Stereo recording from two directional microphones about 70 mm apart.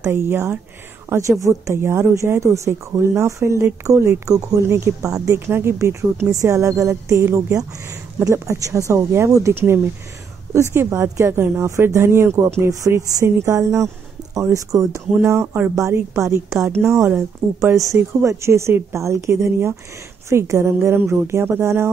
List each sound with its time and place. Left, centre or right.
0.1 s speech: right
6.3 s speech: right
17.7 s speech: right